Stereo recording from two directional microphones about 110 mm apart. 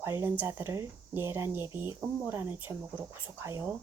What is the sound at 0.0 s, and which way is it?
Speech, 25° right (ahead or behind).